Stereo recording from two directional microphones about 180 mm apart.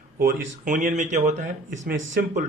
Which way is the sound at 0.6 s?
45° right (ahead or behind).